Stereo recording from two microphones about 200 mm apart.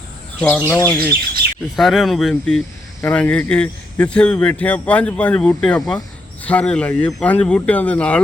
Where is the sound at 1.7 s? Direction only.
Centre (ahead or behind).